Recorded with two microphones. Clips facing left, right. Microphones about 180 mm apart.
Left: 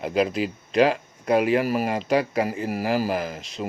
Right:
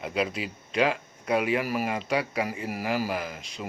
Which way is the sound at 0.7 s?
35° left (ahead or behind).